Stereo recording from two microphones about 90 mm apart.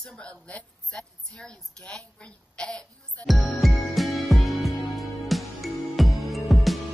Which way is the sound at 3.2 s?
Centre (ahead or behind).